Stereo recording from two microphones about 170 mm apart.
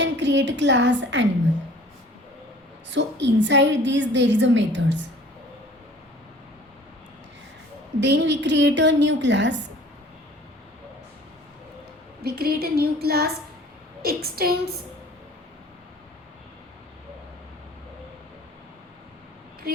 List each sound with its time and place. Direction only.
0.0 s a woman's voice: 90° right
2.9 s a woman's voice: 90° right
8.0 s a woman's voice: 90° right
12.2 s a sound: 65° right (ahead or behind)